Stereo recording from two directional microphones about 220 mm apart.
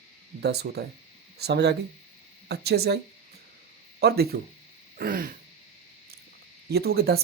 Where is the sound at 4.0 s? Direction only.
45° right (ahead or behind).